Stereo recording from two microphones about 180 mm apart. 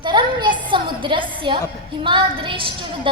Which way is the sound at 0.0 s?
25° right (ahead or behind).